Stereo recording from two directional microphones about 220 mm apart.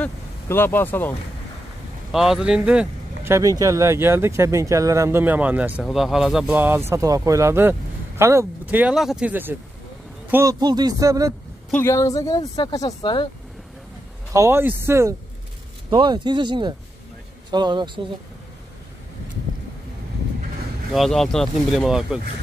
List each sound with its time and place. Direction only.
0.0 s speech: 10° left (ahead or behind)
2.1 s speech: centre (ahead or behind)
11.7 s speech: 10° left (ahead or behind)
14.3 s speech: 10° right (ahead or behind)
20.9 s speech: centre (ahead or behind)